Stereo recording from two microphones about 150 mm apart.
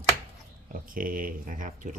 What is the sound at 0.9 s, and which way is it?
Speech, 70° right (ahead or behind).